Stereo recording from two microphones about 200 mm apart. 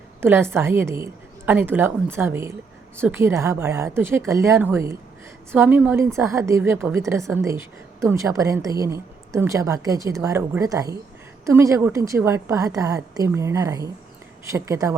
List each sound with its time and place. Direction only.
0.2 s a woman's voice: 10° right (ahead or behind)